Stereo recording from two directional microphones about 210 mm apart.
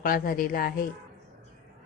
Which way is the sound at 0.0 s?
45° left (ahead or behind).